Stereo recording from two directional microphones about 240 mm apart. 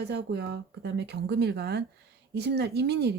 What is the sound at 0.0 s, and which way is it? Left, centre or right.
Speech, right.